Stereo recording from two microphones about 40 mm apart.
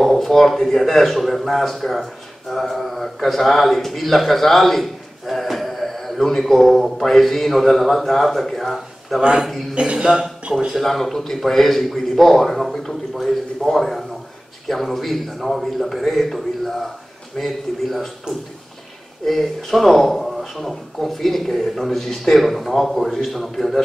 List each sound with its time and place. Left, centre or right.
0.0 s speech: centre
9.2 s a man's voice: right
10.0 s speech: centre
10.7 s speech: centre
19.2 s speech: centre